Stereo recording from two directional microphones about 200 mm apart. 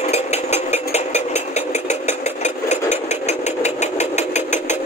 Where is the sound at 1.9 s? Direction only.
35° left (ahead or behind).